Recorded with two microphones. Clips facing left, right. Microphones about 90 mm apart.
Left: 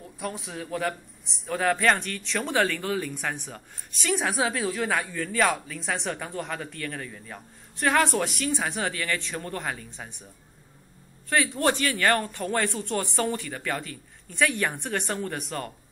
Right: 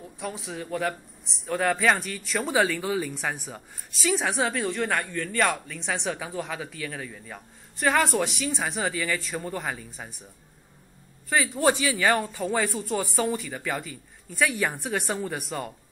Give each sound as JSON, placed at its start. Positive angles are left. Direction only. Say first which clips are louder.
{"t": 0.0, "sound": "a man's voice", "louder": "even", "side_deg": 0}
{"t": 11.2, "sound": "a man's voice", "louder": "right 1 dB", "side_deg": -5}